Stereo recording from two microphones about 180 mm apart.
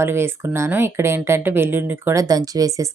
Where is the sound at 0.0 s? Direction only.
15° right (ahead or behind).